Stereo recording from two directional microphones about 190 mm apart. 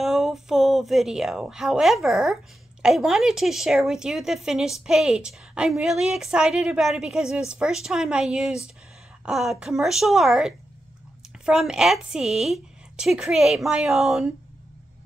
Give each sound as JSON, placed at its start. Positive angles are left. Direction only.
{"t": 0.0, "sound": "a woman's voice", "side_deg": 0}